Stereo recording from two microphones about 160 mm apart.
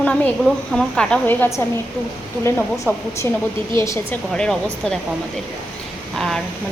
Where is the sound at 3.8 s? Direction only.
20° left (ahead or behind).